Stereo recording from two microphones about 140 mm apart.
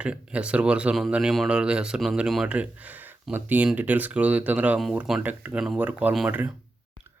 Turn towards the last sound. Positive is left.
turn(degrees=-10)  # may be behind; listen again after turning